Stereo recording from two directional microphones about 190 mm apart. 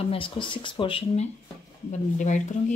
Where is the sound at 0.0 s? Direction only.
30° left (ahead or behind).